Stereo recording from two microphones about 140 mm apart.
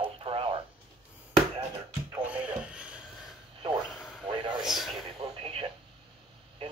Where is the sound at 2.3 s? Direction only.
10° right (ahead or behind).